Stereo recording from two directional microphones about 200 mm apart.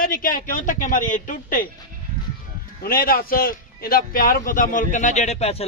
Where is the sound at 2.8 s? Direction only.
45° left (ahead or behind).